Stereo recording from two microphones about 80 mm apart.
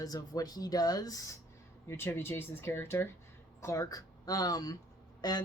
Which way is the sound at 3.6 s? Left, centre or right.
Left.